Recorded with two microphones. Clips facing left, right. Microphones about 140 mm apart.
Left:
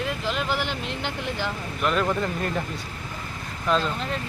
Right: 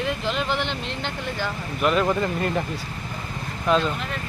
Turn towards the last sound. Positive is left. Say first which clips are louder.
# right 3 dB
turn(degrees=0)  # may be behind; listen again after turning